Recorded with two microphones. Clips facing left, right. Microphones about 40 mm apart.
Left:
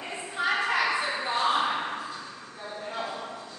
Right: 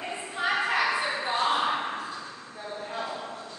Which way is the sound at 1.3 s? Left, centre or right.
Right.